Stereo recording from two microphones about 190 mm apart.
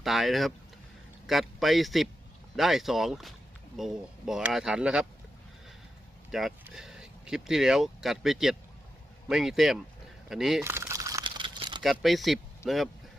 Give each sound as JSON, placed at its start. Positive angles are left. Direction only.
{"t": 0.0, "sound": "speech", "side_deg": 0}
{"t": 6.3, "sound": "speech", "side_deg": 0}
{"t": 10.6, "sound": "crumpling", "side_deg": -15}
{"t": 11.8, "sound": "speech", "side_deg": 0}